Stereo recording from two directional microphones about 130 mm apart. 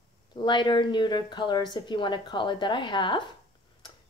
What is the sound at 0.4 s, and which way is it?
A woman's voice, 35° left (ahead or behind).